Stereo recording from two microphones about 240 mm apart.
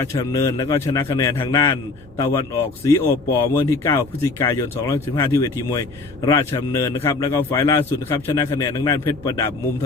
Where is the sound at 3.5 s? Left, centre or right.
Centre.